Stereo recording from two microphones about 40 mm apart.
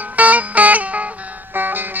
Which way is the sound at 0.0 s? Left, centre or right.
Right.